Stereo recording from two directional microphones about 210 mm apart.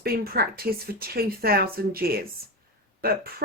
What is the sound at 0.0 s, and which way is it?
A woman's voice, 45° right (ahead or behind).